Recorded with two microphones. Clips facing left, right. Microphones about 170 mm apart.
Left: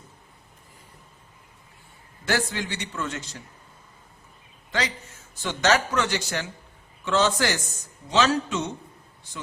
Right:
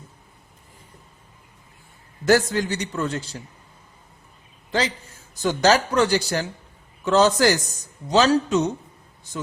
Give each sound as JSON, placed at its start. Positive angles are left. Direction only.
{"t": 2.2, "sound": "a man's voice", "side_deg": -40}
{"t": 5.3, "sound": "a man's voice", "side_deg": -40}